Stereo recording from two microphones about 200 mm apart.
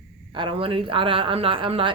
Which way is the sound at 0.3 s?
25° right (ahead or behind).